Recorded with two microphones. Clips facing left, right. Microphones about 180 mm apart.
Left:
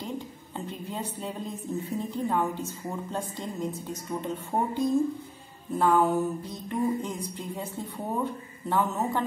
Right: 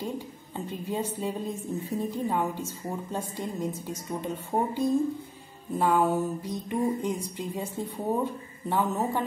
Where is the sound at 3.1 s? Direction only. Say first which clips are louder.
Right 1 dB; 10° right (ahead or behind).